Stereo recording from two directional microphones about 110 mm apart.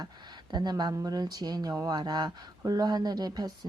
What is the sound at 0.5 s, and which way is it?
Speech, 40° right (ahead or behind).